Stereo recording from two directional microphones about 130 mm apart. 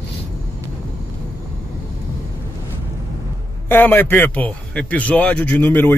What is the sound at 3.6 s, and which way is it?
A man's voice, 15° left (ahead or behind).